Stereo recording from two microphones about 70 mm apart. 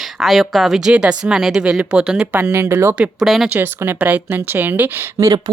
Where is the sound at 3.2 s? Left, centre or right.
Centre.